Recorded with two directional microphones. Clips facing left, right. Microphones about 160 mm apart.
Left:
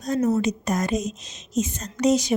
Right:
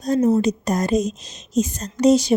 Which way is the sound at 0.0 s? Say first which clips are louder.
Right 4 dB; 30° right (ahead or behind).